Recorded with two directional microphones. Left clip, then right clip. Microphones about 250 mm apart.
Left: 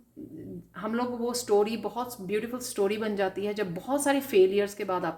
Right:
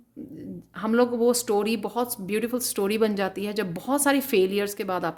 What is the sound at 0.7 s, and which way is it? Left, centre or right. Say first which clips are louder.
Speech: right 8 dB; right.